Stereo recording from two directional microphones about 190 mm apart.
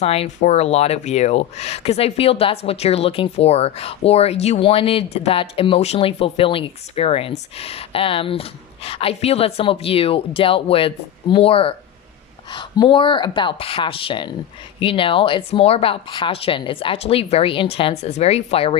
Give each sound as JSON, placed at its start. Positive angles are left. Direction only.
{"t": 0.0, "sound": "speech", "side_deg": 30}